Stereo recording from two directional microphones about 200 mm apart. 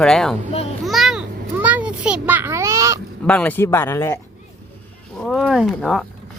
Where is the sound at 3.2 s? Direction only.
5° left (ahead or behind).